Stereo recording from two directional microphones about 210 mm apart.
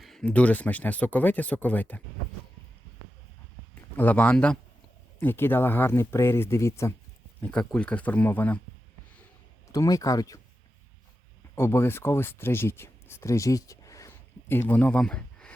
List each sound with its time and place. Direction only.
0.0 s speech: centre (ahead or behind)
3.9 s speech: 10° left (ahead or behind)
9.7 s speech: 15° left (ahead or behind)
11.5 s speech: 10° left (ahead or behind)